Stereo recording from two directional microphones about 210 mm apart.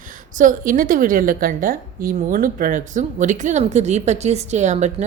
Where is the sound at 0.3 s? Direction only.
40° right (ahead or behind).